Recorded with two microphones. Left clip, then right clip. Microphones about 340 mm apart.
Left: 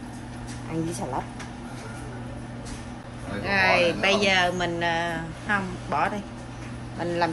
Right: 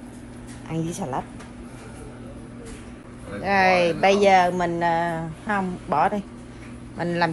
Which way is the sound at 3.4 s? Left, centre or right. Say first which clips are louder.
Right 2 dB; centre.